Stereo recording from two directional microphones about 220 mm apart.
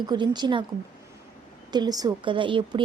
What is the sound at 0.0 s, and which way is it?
Speech, 20° right (ahead or behind).